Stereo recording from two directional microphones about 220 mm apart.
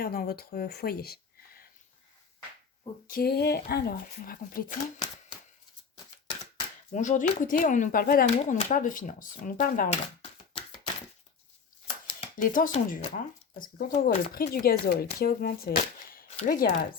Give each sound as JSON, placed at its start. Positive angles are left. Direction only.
{"t": 0.0, "sound": "speech", "side_deg": 45}
{"t": 3.1, "sound": "speech", "side_deg": 45}
{"t": 6.9, "sound": "speech", "side_deg": 35}
{"t": 12.4, "sound": "speech", "side_deg": 35}